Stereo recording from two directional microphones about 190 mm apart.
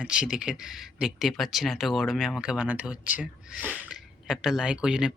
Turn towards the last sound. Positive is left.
turn(degrees=-5)  # may be behind; listen again after turning